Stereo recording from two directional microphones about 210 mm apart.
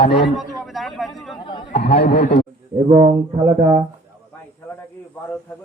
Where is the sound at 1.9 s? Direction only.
50° left (ahead or behind).